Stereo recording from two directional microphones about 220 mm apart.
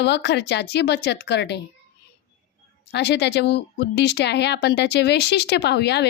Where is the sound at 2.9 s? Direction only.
50° left (ahead or behind).